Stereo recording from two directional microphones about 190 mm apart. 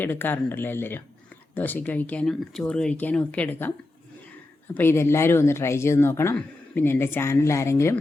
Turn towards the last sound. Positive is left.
turn(degrees=15)  # may be behind; listen again after turning